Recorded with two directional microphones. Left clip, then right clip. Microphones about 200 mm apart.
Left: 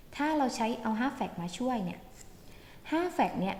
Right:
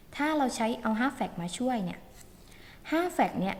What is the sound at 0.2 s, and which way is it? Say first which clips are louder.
A woman's voice: right 1 dB; 15° right (ahead or behind).